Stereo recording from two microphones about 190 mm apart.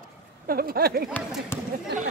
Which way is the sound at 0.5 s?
50° right (ahead or behind).